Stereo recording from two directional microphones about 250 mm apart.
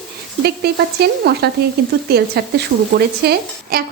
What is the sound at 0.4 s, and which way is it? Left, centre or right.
Speech, right.